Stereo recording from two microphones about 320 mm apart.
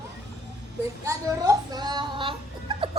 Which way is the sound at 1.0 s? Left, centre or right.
Centre.